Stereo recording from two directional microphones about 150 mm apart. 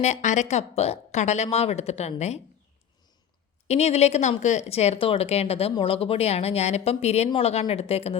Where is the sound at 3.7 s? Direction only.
45° left (ahead or behind).